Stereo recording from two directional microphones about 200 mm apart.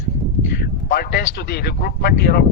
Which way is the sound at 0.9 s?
45° left (ahead or behind).